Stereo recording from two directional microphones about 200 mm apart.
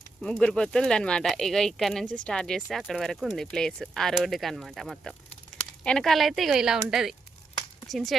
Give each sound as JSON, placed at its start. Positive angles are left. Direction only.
{"t": 0.2, "sound": "speech", "side_deg": 5}